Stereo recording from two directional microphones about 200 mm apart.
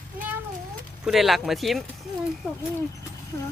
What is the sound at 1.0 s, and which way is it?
Speech, centre (ahead or behind).